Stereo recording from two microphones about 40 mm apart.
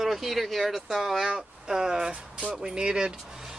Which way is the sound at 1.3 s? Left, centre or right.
Centre.